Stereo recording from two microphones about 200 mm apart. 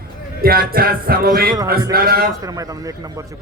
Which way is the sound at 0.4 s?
50° right (ahead or behind).